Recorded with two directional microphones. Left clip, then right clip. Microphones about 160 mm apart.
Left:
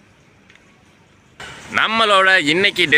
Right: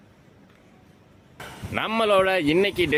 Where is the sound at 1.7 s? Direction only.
5° right (ahead or behind).